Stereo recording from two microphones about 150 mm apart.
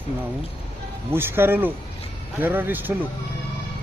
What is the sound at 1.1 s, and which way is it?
Speech, 15° right (ahead or behind).